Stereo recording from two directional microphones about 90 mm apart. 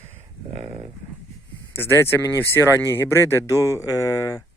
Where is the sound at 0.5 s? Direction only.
90° right.